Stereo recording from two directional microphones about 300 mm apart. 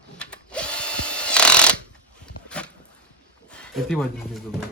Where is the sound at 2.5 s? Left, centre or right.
Centre.